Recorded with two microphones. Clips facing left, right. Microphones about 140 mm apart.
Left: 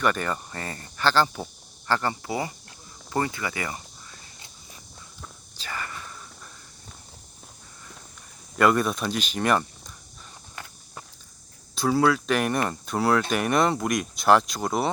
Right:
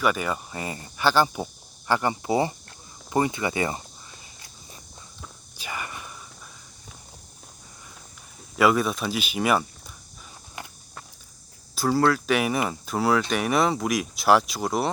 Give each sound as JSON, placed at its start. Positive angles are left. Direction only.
{"t": 0.0, "sound": "speech", "side_deg": -5}
{"t": 5.5, "sound": "whispering", "side_deg": -15}
{"t": 8.5, "sound": "speech", "side_deg": -5}
{"t": 11.7, "sound": "speech", "side_deg": 0}